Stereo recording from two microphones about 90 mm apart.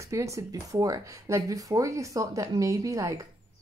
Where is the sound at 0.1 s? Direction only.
35° right (ahead or behind).